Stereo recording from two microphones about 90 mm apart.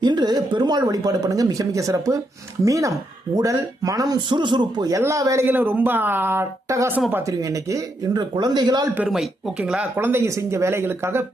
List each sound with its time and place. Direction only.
0.0 s speech: 55° right (ahead or behind)
4.9 s speech: 35° right (ahead or behind)
5.5 s speech: 20° right (ahead or behind); by 8.9 s 50° right (ahead or behind)
9.0 s speech: 5° right (ahead or behind)
9.9 s speech: 25° right (ahead or behind)